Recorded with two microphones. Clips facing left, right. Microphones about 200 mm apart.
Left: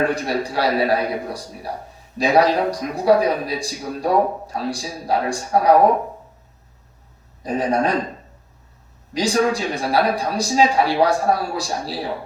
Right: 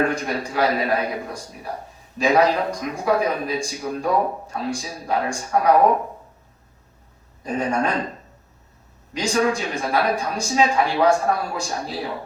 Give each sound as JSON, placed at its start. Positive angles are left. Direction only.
{"t": 0.1, "sound": "a man's voice", "side_deg": 35}
{"t": 7.4, "sound": "a man's voice", "side_deg": 35}
{"t": 9.1, "sound": "a man's voice", "side_deg": 35}